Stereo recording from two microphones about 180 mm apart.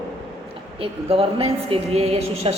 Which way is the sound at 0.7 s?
30° right (ahead or behind).